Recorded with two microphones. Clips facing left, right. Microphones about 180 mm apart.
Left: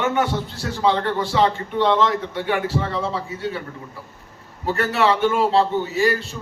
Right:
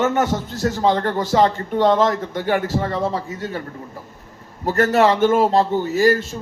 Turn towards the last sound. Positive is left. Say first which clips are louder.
# right 4 dB
turn(degrees=-45)  # may be behind; listen again after turning